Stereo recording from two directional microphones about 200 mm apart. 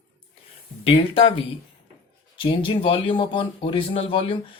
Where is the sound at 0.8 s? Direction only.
30° left (ahead or behind).